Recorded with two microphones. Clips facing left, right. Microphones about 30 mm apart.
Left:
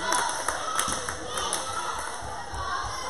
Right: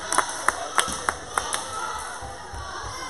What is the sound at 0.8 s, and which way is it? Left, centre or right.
Clapping, right.